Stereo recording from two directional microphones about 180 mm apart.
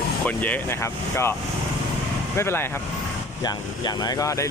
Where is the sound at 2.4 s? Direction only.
15° left (ahead or behind).